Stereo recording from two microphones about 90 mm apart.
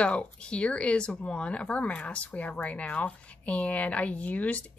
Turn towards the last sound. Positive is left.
turn(degrees=15)  # may be behind; listen again after turning